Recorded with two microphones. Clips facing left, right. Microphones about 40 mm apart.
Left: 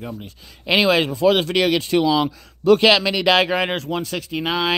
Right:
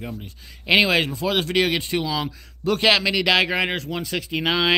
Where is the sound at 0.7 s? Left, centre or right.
Centre.